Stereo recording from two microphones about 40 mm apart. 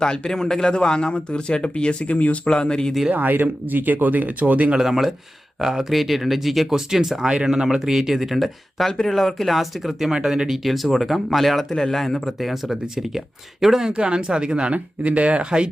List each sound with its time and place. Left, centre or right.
0.3 s speech: centre
2.1 s speech: left
2.4 s speech: left
3.1 s speech: right
4.8 s speech: centre
5.9 s speech: centre
8.9 s speech: centre
9.1 s speech: centre
10.1 s speech: centre
10.6 s speech: centre
11.7 s speech: centre
13.9 s speech: right